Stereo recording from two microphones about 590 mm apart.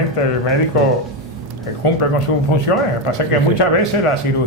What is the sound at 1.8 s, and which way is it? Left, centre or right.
Speech, left.